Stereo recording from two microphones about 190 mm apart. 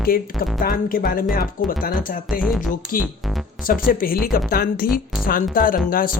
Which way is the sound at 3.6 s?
50° left (ahead or behind).